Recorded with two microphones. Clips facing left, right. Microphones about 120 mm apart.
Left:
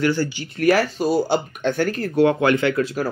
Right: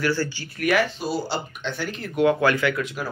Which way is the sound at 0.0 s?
20° left (ahead or behind).